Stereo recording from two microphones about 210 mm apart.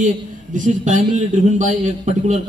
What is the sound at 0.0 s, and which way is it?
A man's voice, 35° right (ahead or behind).